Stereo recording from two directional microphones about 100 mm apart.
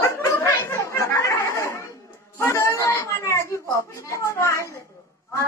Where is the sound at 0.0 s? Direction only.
25° left (ahead or behind).